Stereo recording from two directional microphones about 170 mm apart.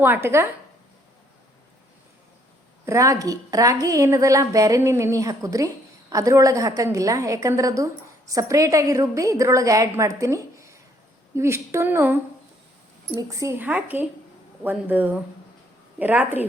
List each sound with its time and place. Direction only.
0.0 s a woman's voice: 15° right (ahead or behind)
2.8 s a woman's voice: 20° right (ahead or behind)
13.1 s a woman's voice: 20° right (ahead or behind)